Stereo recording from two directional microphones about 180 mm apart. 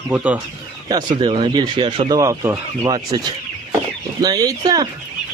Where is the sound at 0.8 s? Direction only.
25° right (ahead or behind).